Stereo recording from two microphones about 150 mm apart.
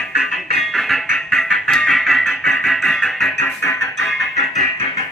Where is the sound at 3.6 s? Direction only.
20° left (ahead or behind).